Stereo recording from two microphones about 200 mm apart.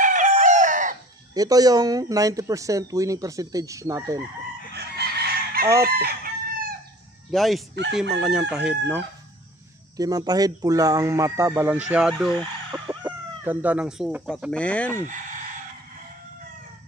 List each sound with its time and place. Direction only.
0.0 s chicken: 40° right (ahead or behind)
1.3 s speech: 20° right (ahead or behind)
4.7 s chicken: 55° right (ahead or behind)
7.2 s chicken: centre (ahead or behind)
9.9 s speech: 20° right (ahead or behind); by 12.3 s 5° right (ahead or behind)
12.7 s speech: 20° right (ahead or behind); by 15.0 s 5° left (ahead or behind)